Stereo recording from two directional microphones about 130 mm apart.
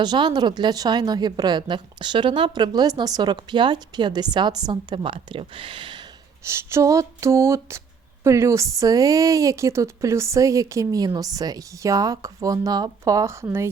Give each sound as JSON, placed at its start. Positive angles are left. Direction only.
{"t": 0.0, "sound": "a woman's voice", "side_deg": -35}
{"t": 6.4, "sound": "a woman's voice", "side_deg": -20}